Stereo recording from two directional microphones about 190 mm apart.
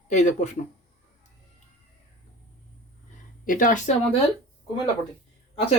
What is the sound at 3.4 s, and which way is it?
Speech, 45° left (ahead or behind).